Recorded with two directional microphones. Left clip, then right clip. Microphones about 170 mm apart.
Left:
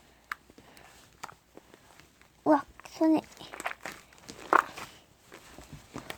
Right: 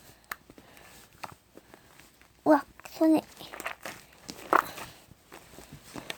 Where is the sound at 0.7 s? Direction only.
Centre (ahead or behind).